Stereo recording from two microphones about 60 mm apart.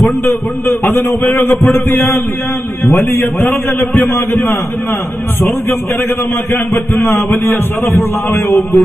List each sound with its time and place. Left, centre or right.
0.2 s a man's voice: left
2.8 s a man's voice: left
6.5 s a man's voice: left